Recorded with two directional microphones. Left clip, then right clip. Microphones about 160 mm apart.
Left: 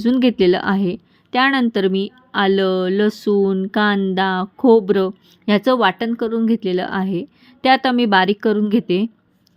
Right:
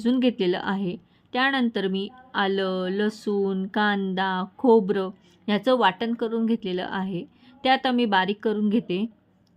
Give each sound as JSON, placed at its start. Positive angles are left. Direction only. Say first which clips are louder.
{"t": 0.0, "sound": "a woman's voice", "louder": "left 8 dB", "side_deg": 25}